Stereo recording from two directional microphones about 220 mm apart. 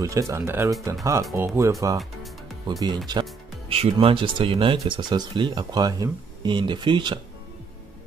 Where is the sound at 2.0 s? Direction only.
Centre (ahead or behind).